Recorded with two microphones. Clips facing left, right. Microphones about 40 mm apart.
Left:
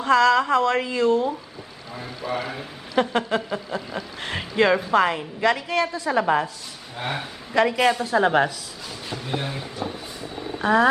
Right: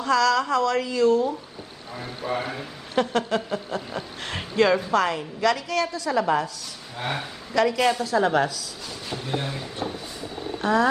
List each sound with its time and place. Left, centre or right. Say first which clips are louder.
0.0 s a woman's voice: left 3 dB; left
2.2 s a woman's voice: even; left
6.9 s speech: even; centre
7.5 s a woman's voice: left 2 dB; left
9.4 s speech: left 1 dB; centre
10.6 s speech: left 3 dB; left